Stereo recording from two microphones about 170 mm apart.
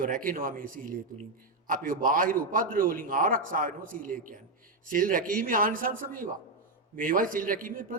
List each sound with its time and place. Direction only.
0.0 s a man's voice: 55° right (ahead or behind)